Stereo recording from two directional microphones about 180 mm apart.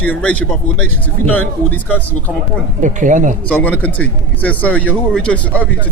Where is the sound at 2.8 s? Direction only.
45° right (ahead or behind).